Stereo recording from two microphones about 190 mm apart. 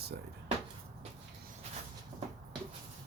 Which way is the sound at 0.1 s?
55° right (ahead or behind).